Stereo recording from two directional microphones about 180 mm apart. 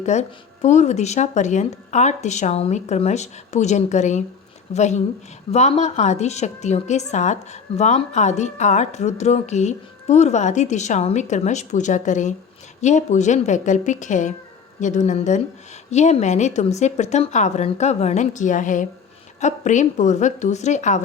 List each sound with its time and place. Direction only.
0.0 s a woman's voice: 40° left (ahead or behind)